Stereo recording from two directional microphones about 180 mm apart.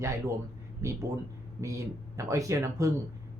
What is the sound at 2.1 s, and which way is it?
Speech, 15° right (ahead or behind).